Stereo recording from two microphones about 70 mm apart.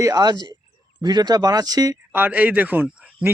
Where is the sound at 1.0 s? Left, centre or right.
Right.